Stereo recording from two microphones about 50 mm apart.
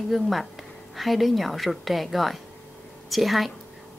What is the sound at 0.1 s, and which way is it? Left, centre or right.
A woman's voice, centre.